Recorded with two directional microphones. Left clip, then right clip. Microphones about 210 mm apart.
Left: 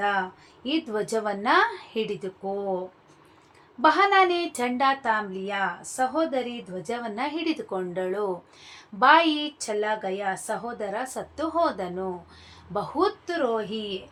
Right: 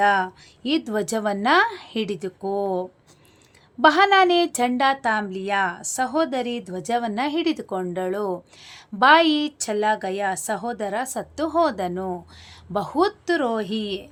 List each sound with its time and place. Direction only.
0.0 s speech: 30° right (ahead or behind)
3.8 s speech: 30° right (ahead or behind)